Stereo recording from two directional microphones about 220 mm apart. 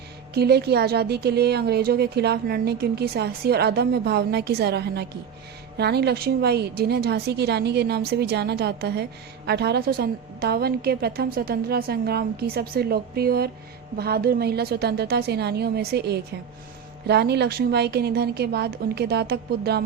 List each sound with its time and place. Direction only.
0.3 s speech: 45° right (ahead or behind)